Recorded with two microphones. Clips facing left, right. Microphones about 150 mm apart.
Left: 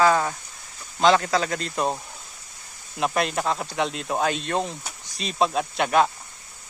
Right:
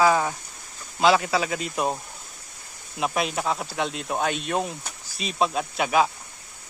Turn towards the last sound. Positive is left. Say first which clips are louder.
# left 1 dB
turn(degrees=0)  # may be behind; listen again after turning